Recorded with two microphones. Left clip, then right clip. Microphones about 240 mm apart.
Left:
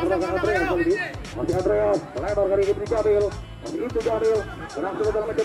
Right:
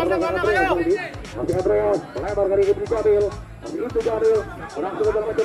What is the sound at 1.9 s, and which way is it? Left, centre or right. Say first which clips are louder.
Speech: right 1 dB; centre.